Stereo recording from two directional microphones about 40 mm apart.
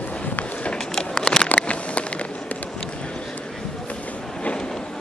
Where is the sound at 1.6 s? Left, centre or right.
Left.